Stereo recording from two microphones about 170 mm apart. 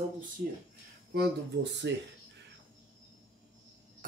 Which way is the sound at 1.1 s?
90° right.